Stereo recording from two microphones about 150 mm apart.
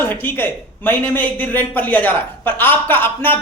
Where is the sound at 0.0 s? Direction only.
15° left (ahead or behind).